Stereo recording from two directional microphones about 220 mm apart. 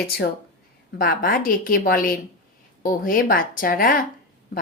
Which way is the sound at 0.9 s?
40° left (ahead or behind).